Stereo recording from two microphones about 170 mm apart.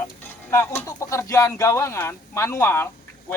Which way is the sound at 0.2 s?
15° left (ahead or behind).